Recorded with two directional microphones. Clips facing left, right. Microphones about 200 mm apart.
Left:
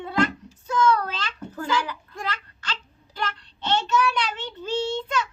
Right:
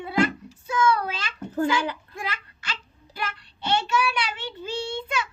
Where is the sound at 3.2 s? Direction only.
10° right (ahead or behind).